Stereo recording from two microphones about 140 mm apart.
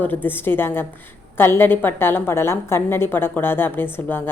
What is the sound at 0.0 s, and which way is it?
Speech, 15° left (ahead or behind).